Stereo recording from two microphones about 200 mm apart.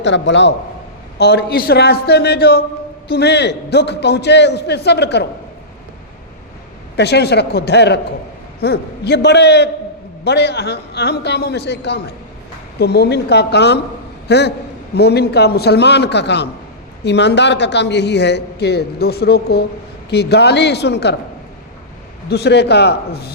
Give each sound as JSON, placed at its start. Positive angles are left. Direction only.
{"t": 0.0, "sound": "a man's voice", "side_deg": 65}
{"t": 6.9, "sound": "a man's voice", "side_deg": 55}
{"t": 22.3, "sound": "a man's voice", "side_deg": 55}